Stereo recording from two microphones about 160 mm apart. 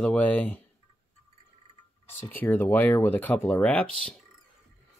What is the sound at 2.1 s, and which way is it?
Speech, 15° left (ahead or behind).